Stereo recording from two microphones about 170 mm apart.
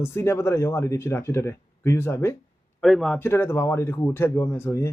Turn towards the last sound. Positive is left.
turn(degrees=15)  # may be behind; listen again after turning